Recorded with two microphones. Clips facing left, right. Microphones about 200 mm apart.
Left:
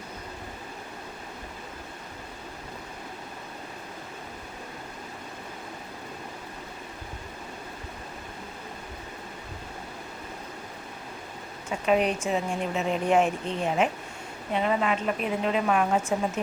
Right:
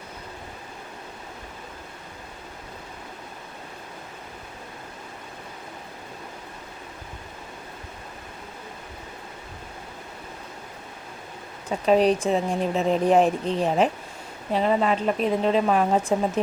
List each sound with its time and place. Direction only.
11.9 s speech: 35° right (ahead or behind)